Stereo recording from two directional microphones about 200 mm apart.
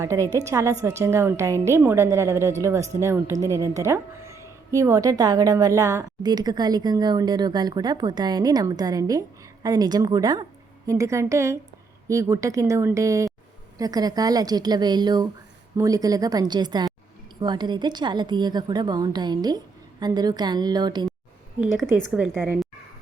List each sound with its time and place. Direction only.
0.0 s a woman's voice: 15° right (ahead or behind)
21.8 s a woman's voice: 70° left (ahead or behind)
22.1 s a woman's voice: 5° right (ahead or behind)